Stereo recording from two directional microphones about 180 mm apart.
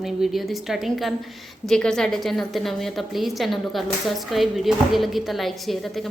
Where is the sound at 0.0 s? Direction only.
Centre (ahead or behind).